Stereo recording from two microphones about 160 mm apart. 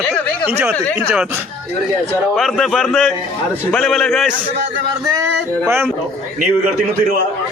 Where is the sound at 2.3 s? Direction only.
Centre (ahead or behind).